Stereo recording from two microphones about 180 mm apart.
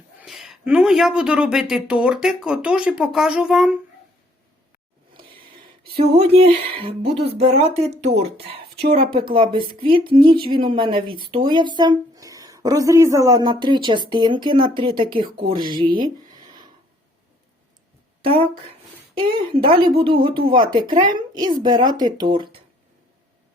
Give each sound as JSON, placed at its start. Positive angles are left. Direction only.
{"t": 0.2, "sound": "speech", "side_deg": 0}
{"t": 6.1, "sound": "speech", "side_deg": -35}
{"t": 19.2, "sound": "speech", "side_deg": -30}